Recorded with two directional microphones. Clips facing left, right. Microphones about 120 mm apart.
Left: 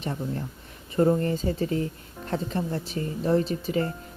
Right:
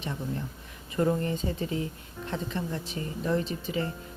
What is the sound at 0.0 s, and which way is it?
Speech, 40° left (ahead or behind).